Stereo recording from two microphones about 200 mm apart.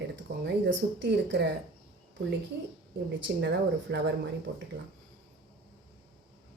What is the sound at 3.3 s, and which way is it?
Speech, 55° right (ahead or behind).